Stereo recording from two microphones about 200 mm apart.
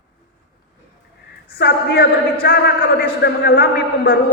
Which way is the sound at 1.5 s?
50° left (ahead or behind).